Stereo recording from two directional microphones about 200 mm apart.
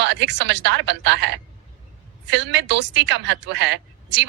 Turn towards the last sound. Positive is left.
turn(degrees=-60)  # may be behind; listen again after turning